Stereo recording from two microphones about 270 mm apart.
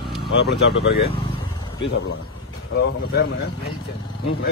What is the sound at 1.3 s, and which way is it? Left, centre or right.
Vehicle, centre.